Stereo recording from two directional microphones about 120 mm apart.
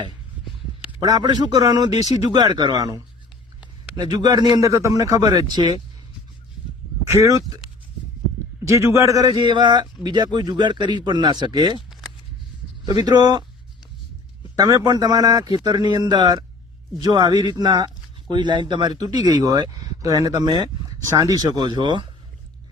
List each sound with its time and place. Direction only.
1.0 s a man's voice: 35° right (ahead or behind)
7.1 s speech: 25° right (ahead or behind)
8.6 s a man's voice: 25° right (ahead or behind)
12.8 s a man's voice: 35° right (ahead or behind)
14.5 s a man's voice: 30° right (ahead or behind)